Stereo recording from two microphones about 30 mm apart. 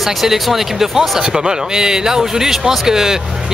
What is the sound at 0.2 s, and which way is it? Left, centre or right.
Speech, centre.